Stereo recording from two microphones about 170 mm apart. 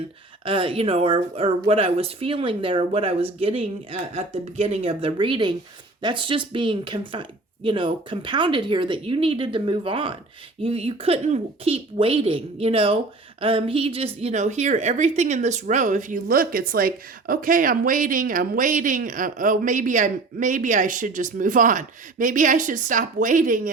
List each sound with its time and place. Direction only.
0.4 s a woman's voice: 30° right (ahead or behind); by 23.6 s 50° right (ahead or behind)